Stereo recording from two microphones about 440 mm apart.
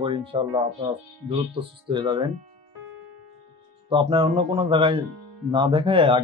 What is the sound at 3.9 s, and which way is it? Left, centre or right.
Speech, centre.